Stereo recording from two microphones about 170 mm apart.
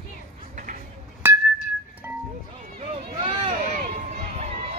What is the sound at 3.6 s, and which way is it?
Run, 40° right (ahead or behind).